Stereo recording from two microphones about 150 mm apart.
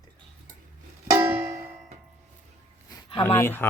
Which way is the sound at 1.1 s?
10° right (ahead or behind).